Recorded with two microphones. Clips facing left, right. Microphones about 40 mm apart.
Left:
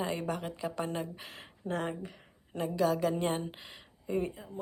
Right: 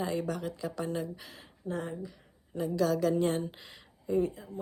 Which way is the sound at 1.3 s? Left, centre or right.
Left.